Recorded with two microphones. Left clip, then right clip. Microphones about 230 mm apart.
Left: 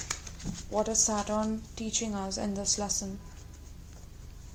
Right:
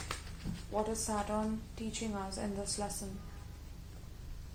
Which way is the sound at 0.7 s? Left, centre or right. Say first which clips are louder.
Left 7 dB; left.